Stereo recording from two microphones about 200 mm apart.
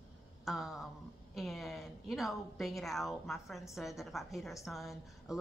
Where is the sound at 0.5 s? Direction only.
Centre (ahead or behind).